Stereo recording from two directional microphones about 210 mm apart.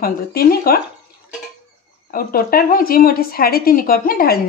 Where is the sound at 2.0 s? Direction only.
45° left (ahead or behind).